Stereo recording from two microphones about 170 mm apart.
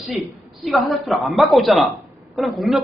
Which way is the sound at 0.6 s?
Centre (ahead or behind).